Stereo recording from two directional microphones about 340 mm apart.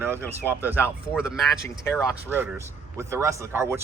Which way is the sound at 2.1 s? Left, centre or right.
Centre.